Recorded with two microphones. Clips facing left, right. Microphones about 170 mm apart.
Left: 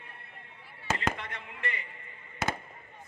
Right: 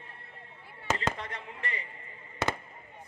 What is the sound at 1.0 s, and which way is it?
Fireworks, 35° right (ahead or behind).